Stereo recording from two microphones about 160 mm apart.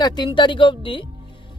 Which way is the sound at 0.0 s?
25° left (ahead or behind).